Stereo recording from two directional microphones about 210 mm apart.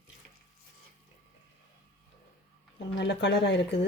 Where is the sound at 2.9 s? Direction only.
55° left (ahead or behind).